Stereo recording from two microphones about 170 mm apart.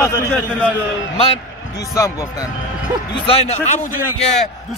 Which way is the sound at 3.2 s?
35° left (ahead or behind).